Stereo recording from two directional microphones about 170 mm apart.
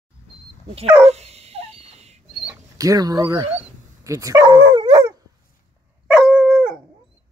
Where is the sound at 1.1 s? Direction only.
40° right (ahead or behind).